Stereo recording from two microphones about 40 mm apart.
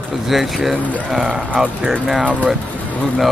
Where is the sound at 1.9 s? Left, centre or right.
Centre.